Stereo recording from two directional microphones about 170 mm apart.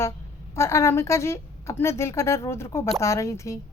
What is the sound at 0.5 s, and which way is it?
A woman's voice, 15° left (ahead or behind).